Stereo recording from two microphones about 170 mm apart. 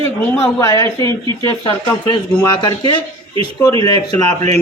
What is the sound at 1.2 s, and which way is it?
Speech, 25° right (ahead or behind).